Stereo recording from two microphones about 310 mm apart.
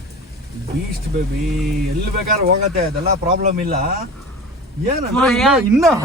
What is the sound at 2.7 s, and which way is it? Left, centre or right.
Speech, right.